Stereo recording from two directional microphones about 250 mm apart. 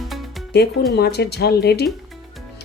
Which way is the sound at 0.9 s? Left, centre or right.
Left.